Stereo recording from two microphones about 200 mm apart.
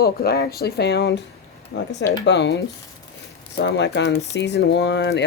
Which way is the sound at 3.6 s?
60° left (ahead or behind).